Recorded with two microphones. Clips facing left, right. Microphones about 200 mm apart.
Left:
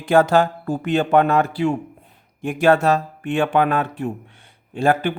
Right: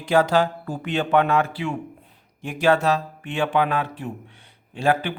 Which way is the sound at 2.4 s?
50° left (ahead or behind).